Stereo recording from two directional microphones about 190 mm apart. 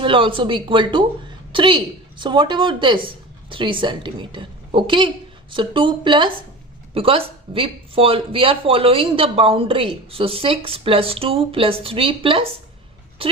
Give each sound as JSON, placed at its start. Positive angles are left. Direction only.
{"t": 0.0, "sound": "speech", "side_deg": -25}